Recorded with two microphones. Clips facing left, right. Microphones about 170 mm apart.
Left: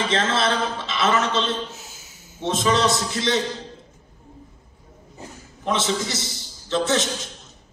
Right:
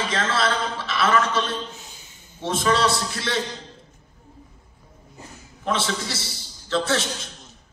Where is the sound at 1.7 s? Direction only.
5° left (ahead or behind).